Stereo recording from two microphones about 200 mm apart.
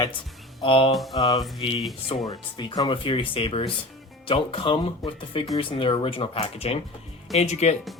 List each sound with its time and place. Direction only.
0.6 s speech: 25° left (ahead or behind)
0.9 s mantra: centre (ahead or behind)
1.2 s mantra: 20° left (ahead or behind)
1.5 s speech: 25° left (ahead or behind)